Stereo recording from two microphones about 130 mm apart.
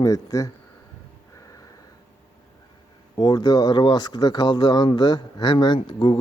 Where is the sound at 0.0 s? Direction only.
25° left (ahead or behind).